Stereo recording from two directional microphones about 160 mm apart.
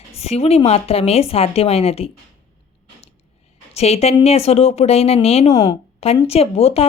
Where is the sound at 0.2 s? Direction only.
40° left (ahead or behind).